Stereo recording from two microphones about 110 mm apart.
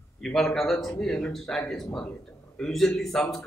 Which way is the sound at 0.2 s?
5° left (ahead or behind).